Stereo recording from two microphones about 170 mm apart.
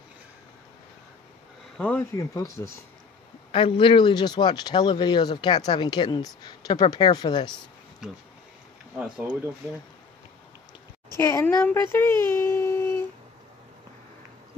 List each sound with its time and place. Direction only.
1.8 s speech: 10° left (ahead or behind)
2.1 s speech: 20° left (ahead or behind)
3.5 s speech: 30° left (ahead or behind)
8.0 s speech: 5° right (ahead or behind)
11.1 s speech: 15° left (ahead or behind)